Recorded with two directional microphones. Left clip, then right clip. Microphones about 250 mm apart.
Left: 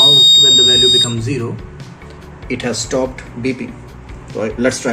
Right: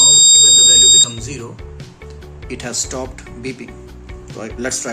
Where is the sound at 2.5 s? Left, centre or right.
Centre.